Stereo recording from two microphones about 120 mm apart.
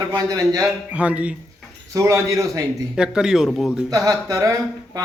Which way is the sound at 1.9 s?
25° right (ahead or behind).